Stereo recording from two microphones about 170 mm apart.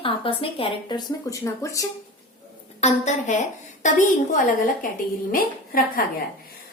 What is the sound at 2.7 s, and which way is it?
A woman's voice, 40° left (ahead or behind).